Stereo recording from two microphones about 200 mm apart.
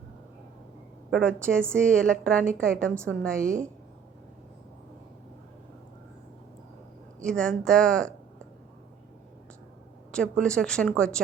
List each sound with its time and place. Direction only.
1.1 s speech: 5° left (ahead or behind)
3.4 s a woman's voice: 40° right (ahead or behind)
7.2 s speech: 5° left (ahead or behind)
10.1 s speech: 5° left (ahead or behind)